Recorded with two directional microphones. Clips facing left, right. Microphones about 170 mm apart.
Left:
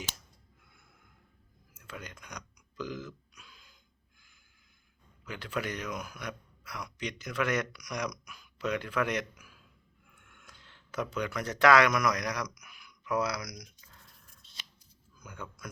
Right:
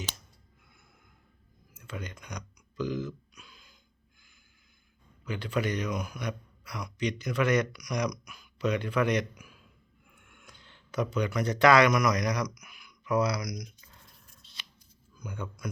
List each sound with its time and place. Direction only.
1.8 s a sound: 5° left (ahead or behind)
5.2 s a man's voice: centre (ahead or behind)
10.1 s a sound: 5° right (ahead or behind)
11.1 s a man's voice: 5° left (ahead or behind)
14.4 s scissors: 45° left (ahead or behind)
15.2 s a man's voice: 5° left (ahead or behind)